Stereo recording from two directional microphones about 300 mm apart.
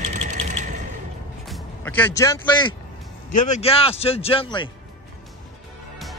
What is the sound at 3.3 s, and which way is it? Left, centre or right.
A man's voice, left.